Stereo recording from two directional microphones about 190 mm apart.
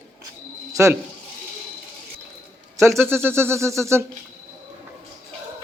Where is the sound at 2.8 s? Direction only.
15° right (ahead or behind).